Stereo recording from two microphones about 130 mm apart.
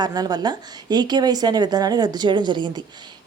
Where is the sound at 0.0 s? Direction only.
30° right (ahead or behind).